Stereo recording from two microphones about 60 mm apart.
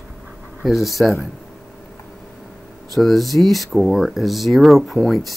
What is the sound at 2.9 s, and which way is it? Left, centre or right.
Speech, centre.